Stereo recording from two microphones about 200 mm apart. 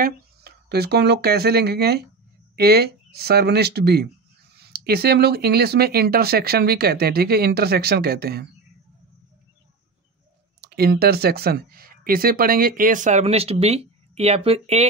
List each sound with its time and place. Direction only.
0.0 s speech: 50° right (ahead or behind)
10.6 s speech: 55° right (ahead or behind); by 14.9 s 30° right (ahead or behind)